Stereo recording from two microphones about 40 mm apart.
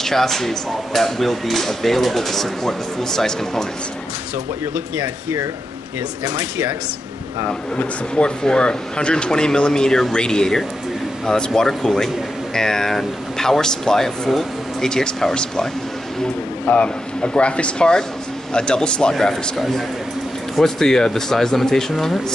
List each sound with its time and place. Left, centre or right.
0.0 s speech: centre
7.7 s speech: left
16.8 s speech: left
19.5 s speech: centre